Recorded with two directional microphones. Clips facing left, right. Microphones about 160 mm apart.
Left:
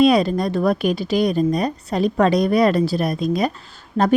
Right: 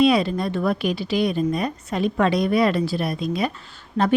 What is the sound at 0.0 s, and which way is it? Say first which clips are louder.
A woman's voice: left 3 dB; 45° left (ahead or behind).